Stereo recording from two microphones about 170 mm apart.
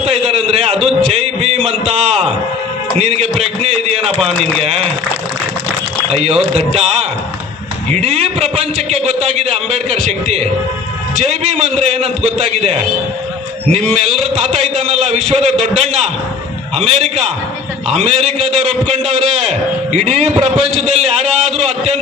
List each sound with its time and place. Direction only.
0.0 s a sound: 35° right (ahead or behind)
3.0 s music: 35° right (ahead or behind)
3.6 s a sound: 35° right (ahead or behind)
4.6 s a man's voice: 35° right (ahead or behind)
6.1 s a man's voice: 35° right (ahead or behind)
13.9 s a man's voice: 40° right (ahead or behind)